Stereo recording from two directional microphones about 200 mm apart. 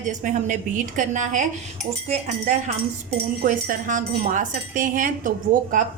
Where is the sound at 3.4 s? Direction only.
40° right (ahead or behind).